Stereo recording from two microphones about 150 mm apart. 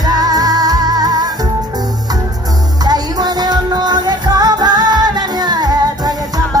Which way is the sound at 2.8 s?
25° right (ahead or behind).